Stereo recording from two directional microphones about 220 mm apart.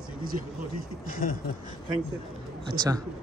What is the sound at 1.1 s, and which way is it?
Speech, 40° left (ahead or behind).